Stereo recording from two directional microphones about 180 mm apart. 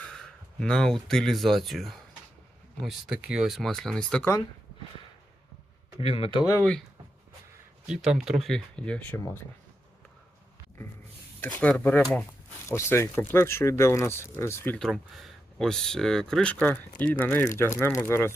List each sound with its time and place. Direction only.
0.0 s speech: 5° left (ahead or behind)
6.0 s speech: 30° left (ahead or behind)
6.6 s speech: 5° left (ahead or behind)
7.9 s speech: 5° right (ahead or behind)
11.3 s speech: 10° left (ahead or behind)
14.8 s speech: centre (ahead or behind)